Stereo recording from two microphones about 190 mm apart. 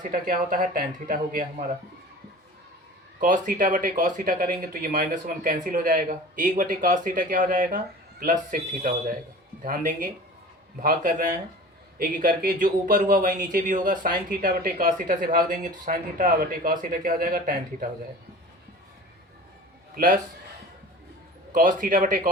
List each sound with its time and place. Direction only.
0.0 s speech: 45° right (ahead or behind)
3.2 s speech: 45° right (ahead or behind)
21.5 s speech: 45° right (ahead or behind)